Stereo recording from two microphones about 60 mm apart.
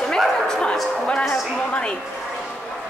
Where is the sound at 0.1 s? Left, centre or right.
Centre.